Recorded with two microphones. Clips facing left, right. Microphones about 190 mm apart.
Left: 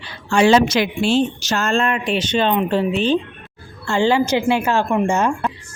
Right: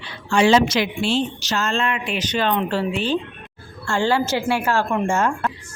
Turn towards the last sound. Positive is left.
turn(degrees=20)  # may be behind; listen again after turning